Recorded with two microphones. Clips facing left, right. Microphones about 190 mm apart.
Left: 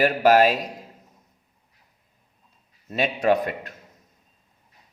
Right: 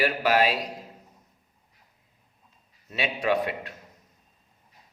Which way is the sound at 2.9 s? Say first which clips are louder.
Left 5 dB; 45° left (ahead or behind).